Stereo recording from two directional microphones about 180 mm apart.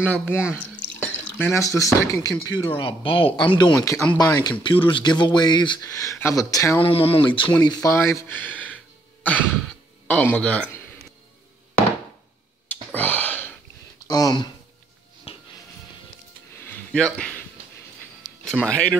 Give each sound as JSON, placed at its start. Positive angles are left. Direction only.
{"t": 0.0, "sound": "speech", "side_deg": 10}
{"t": 6.8, "sound": "speech", "side_deg": 30}
{"t": 10.0, "sound": "speech", "side_deg": 10}
{"t": 12.9, "sound": "a sound", "side_deg": 10}
{"t": 14.0, "sound": "speech", "side_deg": 20}
{"t": 15.3, "sound": "music", "side_deg": 35}
{"t": 16.5, "sound": "a sound", "side_deg": 10}
{"t": 18.4, "sound": "speech", "side_deg": 5}